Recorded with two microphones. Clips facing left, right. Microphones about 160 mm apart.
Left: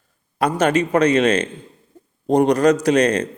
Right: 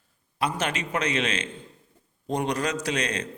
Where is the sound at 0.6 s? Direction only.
40° left (ahead or behind).